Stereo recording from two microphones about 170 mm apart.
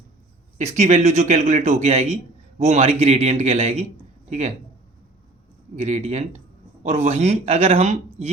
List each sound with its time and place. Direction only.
0.6 s speech: 45° right (ahead or behind)
5.7 s speech: 40° right (ahead or behind)